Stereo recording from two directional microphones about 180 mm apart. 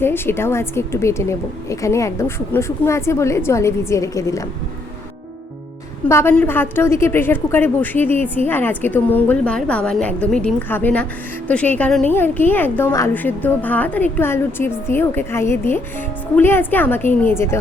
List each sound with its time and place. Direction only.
0.0 s a woman's voice: 15° left (ahead or behind)
6.1 s a woman's voice: 15° left (ahead or behind)